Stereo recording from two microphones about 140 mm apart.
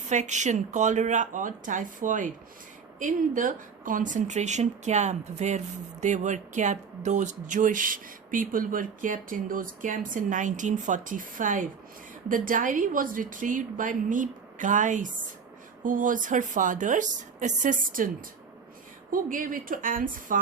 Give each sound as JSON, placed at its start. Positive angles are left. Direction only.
{"t": 0.1, "sound": "speech", "side_deg": -60}
{"t": 19.1, "sound": "speech", "side_deg": -75}